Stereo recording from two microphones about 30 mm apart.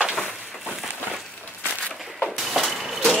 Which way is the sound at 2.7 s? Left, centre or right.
Centre.